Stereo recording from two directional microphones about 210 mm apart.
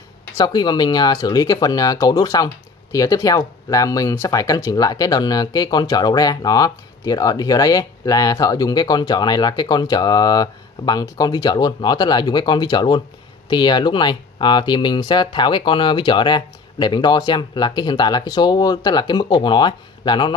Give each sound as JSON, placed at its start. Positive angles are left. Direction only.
{"t": 0.4, "sound": "speech", "side_deg": 20}